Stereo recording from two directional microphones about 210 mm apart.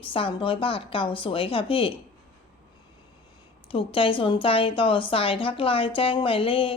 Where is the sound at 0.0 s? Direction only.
25° left (ahead or behind).